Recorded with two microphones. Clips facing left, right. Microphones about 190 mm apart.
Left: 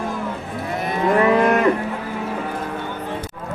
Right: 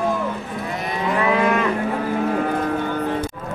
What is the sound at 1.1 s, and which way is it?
Moo, 50° left (ahead or behind).